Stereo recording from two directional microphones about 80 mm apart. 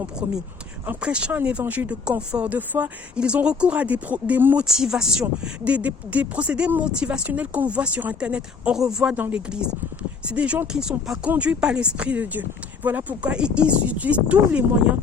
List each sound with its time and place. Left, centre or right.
0.9 s speech: centre
4.6 s speech: centre
9.1 s speech: centre